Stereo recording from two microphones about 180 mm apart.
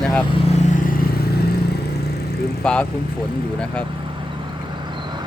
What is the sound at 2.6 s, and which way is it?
Speech, 5° left (ahead or behind).